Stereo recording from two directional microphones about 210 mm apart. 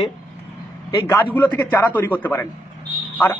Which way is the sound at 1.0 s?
10° left (ahead or behind).